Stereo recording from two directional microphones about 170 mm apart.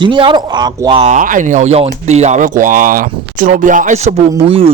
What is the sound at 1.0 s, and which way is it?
Speech, 50° right (ahead or behind).